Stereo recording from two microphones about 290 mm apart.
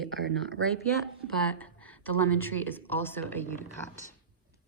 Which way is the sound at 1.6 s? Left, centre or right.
Centre.